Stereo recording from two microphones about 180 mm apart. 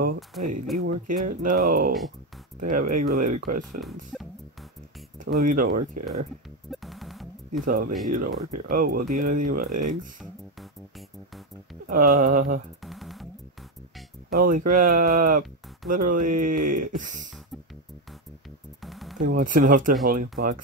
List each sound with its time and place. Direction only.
0.4 s speech: 45° right (ahead or behind)
3.8 s speech: centre (ahead or behind)
5.4 s speech: 50° right (ahead or behind)
6.7 s music: centre (ahead or behind)
7.6 s speech: 50° right (ahead or behind)
8.6 s speech: 55° right (ahead or behind)
10.6 s music: centre (ahead or behind)
11.9 s speech: 45° right (ahead or behind)
12.8 s music: centre (ahead or behind)
14.3 s speech: 50° right (ahead or behind)
18.8 s music: centre (ahead or behind)
19.1 s speech: 50° right (ahead or behind)